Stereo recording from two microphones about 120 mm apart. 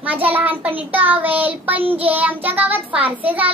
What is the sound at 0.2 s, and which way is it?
Child singing, 15° right (ahead or behind).